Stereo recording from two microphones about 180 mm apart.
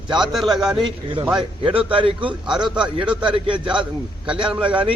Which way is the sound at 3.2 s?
25° right (ahead or behind).